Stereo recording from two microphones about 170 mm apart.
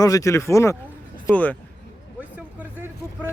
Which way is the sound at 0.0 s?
20° left (ahead or behind).